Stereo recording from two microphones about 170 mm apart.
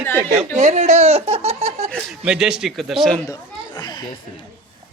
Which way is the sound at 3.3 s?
25° left (ahead or behind).